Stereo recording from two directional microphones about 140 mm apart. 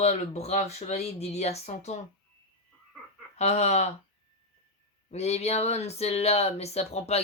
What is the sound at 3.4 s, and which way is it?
Speech, 50° left (ahead or behind).